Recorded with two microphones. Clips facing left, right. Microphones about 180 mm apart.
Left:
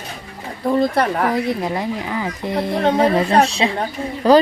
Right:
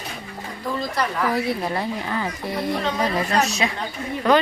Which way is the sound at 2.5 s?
60° left (ahead or behind).